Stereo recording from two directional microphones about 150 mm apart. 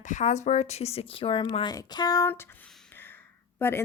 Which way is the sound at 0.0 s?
55° left (ahead or behind).